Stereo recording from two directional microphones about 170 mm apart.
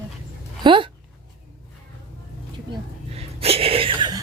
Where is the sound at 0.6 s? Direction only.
30° right (ahead or behind).